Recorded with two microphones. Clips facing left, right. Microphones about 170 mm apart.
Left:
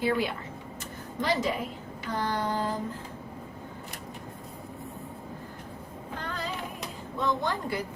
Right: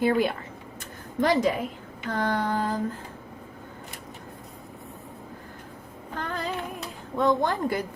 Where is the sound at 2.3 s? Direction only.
50° right (ahead or behind).